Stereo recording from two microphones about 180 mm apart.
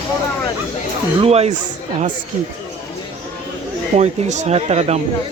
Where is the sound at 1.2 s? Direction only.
35° right (ahead or behind).